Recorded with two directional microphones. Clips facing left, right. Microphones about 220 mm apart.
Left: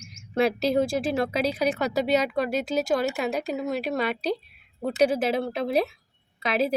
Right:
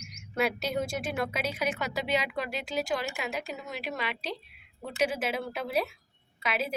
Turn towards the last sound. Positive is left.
turn(degrees=35)  # may be behind; listen again after turning